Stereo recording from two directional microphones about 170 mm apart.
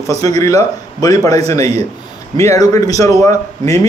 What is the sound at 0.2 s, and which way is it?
A man's voice, 20° left (ahead or behind).